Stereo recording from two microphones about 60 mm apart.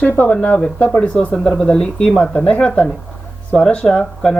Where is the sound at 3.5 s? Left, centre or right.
Centre.